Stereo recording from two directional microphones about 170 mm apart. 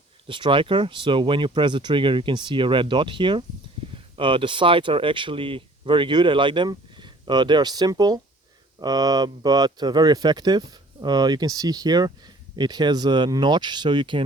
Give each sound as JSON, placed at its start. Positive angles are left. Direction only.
{"t": 0.3, "sound": "speech", "side_deg": -30}